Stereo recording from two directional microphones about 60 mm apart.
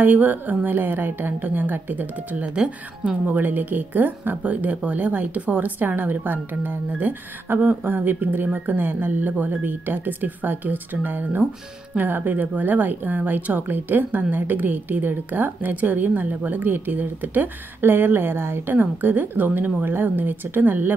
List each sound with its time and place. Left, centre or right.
0.0 s speech: right
2.3 s speech: centre
3.3 s speech: right